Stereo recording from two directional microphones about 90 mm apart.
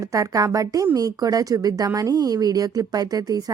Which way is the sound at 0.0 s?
40° right (ahead or behind).